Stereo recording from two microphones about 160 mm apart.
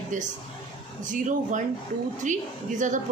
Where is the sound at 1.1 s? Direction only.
50° right (ahead or behind).